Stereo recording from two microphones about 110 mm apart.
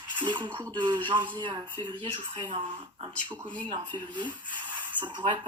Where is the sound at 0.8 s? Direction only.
45° right (ahead or behind).